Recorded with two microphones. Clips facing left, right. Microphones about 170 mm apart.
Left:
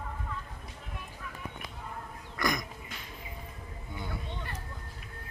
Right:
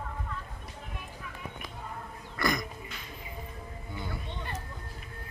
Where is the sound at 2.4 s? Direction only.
15° left (ahead or behind).